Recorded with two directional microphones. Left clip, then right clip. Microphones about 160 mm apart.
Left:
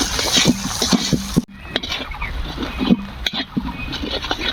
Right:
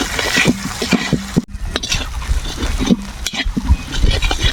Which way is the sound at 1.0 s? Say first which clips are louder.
Right 1 dB; centre (ahead or behind).